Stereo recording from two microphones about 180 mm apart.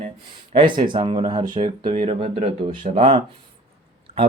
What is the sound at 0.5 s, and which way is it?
Speech, 30° right (ahead or behind).